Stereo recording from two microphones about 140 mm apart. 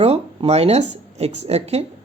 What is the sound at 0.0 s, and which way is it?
A man's voice, 45° right (ahead or behind).